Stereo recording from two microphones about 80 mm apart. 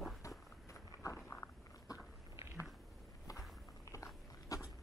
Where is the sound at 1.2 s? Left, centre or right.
Left.